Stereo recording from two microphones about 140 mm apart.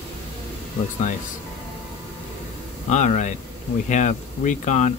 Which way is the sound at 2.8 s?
60° left (ahead or behind).